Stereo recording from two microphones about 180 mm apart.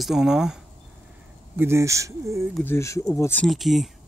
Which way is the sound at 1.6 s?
15° right (ahead or behind).